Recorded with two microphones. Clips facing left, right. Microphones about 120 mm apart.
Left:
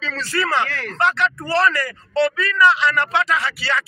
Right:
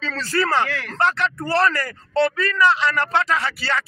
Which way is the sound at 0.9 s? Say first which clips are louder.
Left 1 dB; 45° right (ahead or behind).